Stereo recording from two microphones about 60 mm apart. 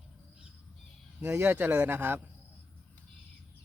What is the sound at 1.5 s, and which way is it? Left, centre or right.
Speech, right.